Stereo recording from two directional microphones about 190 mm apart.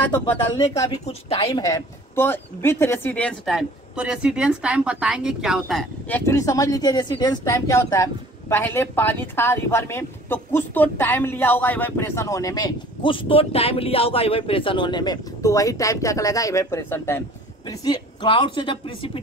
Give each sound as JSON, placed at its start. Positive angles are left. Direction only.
{"t": 1.0, "sound": "a woman's voice", "side_deg": 30}
{"t": 1.6, "sound": "a man's voice", "side_deg": 15}